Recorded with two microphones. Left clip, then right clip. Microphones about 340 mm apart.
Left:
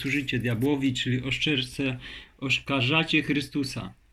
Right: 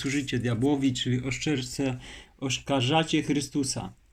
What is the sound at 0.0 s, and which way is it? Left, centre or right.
Speech, right.